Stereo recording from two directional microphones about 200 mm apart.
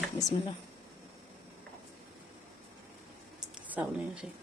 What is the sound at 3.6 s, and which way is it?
Speech, 10° right (ahead or behind).